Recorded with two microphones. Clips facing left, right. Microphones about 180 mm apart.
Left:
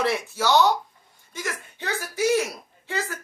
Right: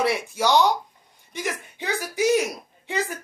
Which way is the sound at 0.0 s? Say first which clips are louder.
Right 1 dB; 15° right (ahead or behind).